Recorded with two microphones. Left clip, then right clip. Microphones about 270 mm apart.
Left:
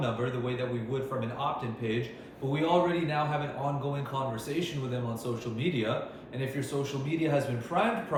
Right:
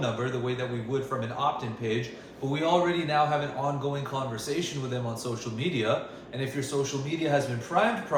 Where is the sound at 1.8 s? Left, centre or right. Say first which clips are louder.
Right 4 dB; centre.